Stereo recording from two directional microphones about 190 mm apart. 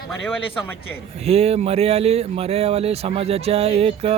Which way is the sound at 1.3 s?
35° right (ahead or behind).